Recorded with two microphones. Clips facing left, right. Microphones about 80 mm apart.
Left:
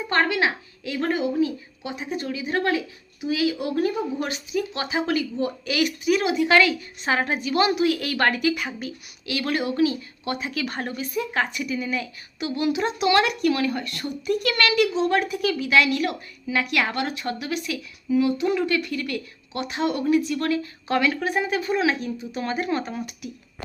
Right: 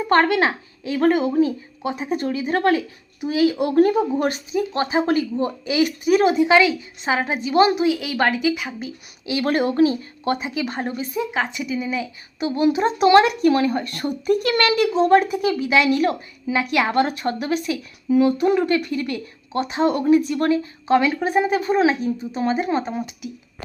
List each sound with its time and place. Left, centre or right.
0.1 s speech: right
4.5 s speech: right
6.4 s speech: centre
7.4 s speech: right
7.9 s speech: centre
8.8 s speech: right
9.4 s speech: right
10.4 s speech: right
11.3 s speech: centre
12.4 s speech: right
22.4 s speech: centre